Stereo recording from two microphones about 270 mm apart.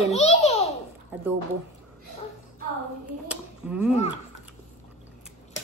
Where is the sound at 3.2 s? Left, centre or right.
Centre.